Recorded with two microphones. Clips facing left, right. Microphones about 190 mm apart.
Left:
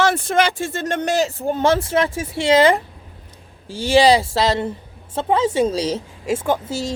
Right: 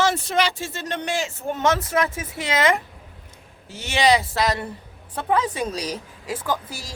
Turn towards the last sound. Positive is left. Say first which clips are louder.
# left 7 dB
turn(degrees=25)  # may be behind; listen again after turning